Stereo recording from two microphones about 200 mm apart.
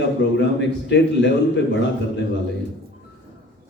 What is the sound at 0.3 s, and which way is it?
Speech, 60° left (ahead or behind).